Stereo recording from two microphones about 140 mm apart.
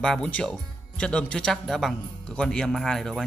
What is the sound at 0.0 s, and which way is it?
Speech, 5° left (ahead or behind).